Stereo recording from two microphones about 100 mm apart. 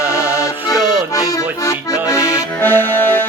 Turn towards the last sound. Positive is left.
turn(degrees=20)  # may be behind; listen again after turning